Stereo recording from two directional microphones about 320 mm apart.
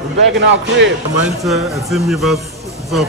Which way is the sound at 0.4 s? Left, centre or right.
Right.